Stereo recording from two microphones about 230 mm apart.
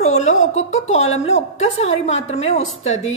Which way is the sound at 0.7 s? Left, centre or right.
Left.